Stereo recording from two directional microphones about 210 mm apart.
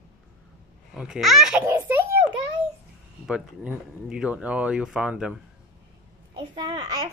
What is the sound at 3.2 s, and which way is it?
A child's voice, 5° right (ahead or behind).